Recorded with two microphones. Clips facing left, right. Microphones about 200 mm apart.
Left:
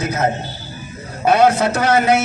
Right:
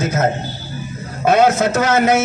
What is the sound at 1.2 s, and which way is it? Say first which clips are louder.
Speech: even; 45° right (ahead or behind).